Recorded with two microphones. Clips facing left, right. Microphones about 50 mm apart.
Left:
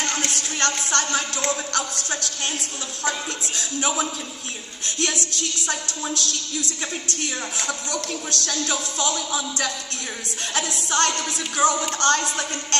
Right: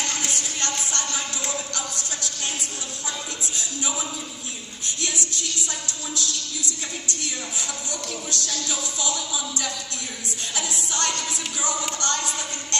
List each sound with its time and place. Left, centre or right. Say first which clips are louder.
0.2 s a woman's voice: left 4 dB; left